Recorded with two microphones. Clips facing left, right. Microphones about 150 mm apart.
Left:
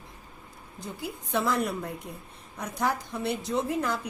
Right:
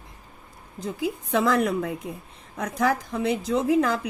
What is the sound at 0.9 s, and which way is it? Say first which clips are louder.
A woman's voice: right 6 dB; 90° right.